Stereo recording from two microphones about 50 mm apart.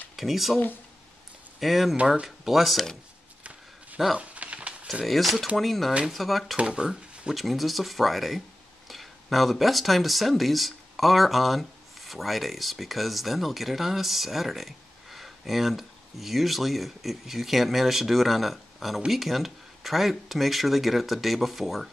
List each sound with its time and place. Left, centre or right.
0.1 s speech: centre
1.6 s speech: centre
4.2 s a sound: right
5.0 s speech: centre
6.5 s speech: centre
7.3 s speech: centre